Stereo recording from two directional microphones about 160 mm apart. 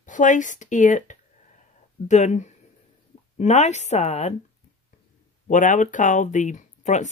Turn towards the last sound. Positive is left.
turn(degrees=50)  # may be behind; listen again after turning